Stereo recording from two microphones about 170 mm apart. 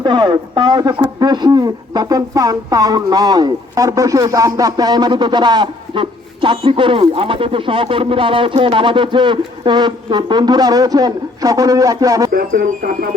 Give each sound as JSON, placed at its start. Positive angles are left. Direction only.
{"t": 0.0, "sound": "speech", "side_deg": -25}
{"t": 12.3, "sound": "speech", "side_deg": -60}